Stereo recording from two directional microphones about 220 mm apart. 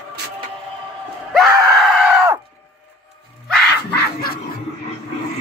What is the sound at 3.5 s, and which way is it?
Battle cry, 45° left (ahead or behind).